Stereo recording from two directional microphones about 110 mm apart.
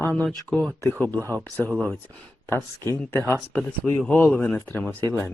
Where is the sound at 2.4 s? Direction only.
20° left (ahead or behind).